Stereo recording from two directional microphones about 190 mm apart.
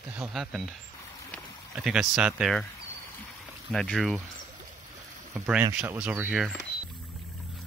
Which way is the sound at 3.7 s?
Centre (ahead or behind).